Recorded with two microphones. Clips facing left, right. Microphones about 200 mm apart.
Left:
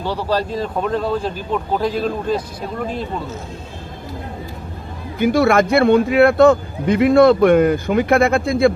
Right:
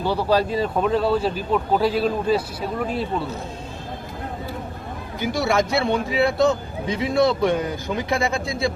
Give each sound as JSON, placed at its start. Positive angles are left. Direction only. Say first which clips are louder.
{"t": 0.0, "sound": "speech", "louder": "right 1 dB", "side_deg": -10}
{"t": 5.2, "sound": "a man's voice", "louder": "left 7 dB", "side_deg": 55}